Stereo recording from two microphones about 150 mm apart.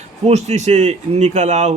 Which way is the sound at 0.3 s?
45° right (ahead or behind).